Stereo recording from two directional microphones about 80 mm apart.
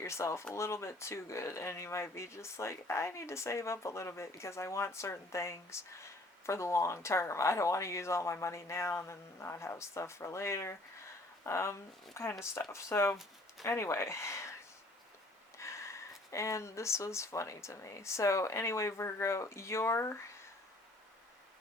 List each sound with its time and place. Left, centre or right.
0.0 s speech: left
15.5 s speech: left